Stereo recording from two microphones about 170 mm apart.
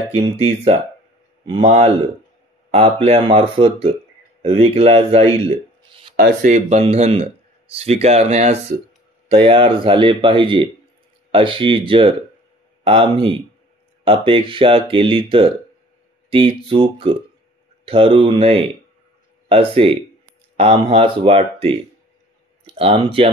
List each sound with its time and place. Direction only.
0.1 s speech: 35° right (ahead or behind)
6.4 s speech: 40° right (ahead or behind)
22.8 s speech: 35° right (ahead or behind)